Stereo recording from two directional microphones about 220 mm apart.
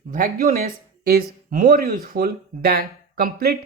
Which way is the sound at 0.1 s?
40° right (ahead or behind).